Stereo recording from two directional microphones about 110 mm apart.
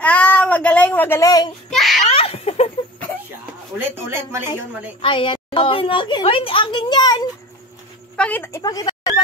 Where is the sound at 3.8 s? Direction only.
20° right (ahead or behind).